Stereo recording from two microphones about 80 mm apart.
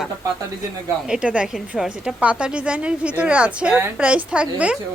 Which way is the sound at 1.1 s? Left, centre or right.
Centre.